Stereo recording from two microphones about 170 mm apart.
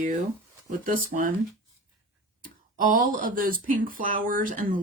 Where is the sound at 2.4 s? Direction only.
55° right (ahead or behind).